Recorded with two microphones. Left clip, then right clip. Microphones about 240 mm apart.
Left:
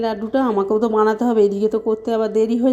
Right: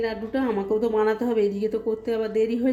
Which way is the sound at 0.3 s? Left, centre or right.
Left.